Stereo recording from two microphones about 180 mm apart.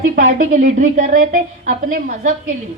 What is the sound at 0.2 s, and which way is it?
A woman's voice, 45° right (ahead or behind).